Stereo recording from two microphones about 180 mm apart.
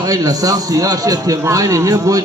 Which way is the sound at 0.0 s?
20° right (ahead or behind).